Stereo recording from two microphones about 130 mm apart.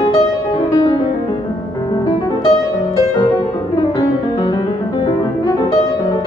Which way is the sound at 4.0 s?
35° left (ahead or behind).